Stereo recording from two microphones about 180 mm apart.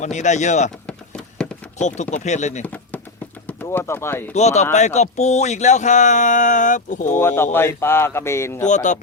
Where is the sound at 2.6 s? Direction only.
10° left (ahead or behind).